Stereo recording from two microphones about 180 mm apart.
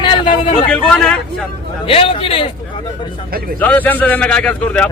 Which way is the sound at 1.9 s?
30° left (ahead or behind).